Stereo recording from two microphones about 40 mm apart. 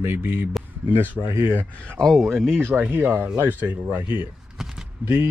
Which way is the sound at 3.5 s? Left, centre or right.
Right.